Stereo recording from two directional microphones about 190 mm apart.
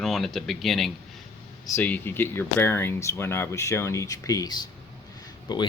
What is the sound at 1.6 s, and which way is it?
Speech, 10° left (ahead or behind).